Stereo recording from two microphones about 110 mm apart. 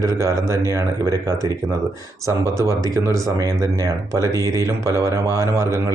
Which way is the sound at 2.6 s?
25° right (ahead or behind).